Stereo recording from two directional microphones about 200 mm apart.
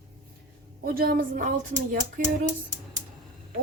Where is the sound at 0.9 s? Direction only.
45° right (ahead or behind).